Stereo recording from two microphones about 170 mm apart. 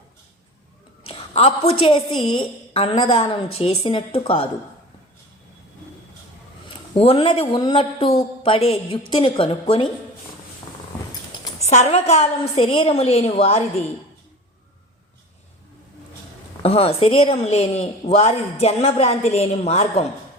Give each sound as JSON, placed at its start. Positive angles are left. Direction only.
{"t": 1.0, "sound": "a woman's voice", "side_deg": 35}
{"t": 6.9, "sound": "a woman's voice", "side_deg": 35}
{"t": 11.6, "sound": "a woman's voice", "side_deg": 40}
{"t": 16.6, "sound": "a woman's voice", "side_deg": 35}